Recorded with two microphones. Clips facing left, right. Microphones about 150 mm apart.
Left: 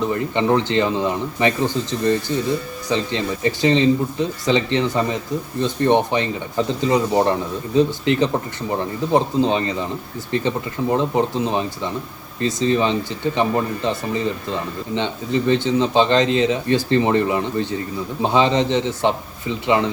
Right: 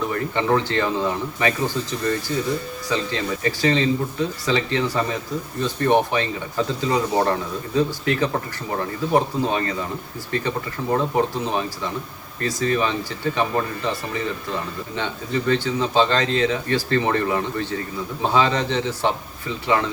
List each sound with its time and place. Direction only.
0.0 s speech: 20° left (ahead or behind)